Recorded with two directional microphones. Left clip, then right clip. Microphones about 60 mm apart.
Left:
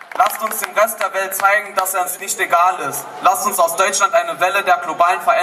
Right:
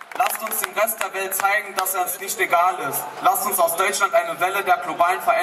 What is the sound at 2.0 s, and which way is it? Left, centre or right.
A man's voice, left.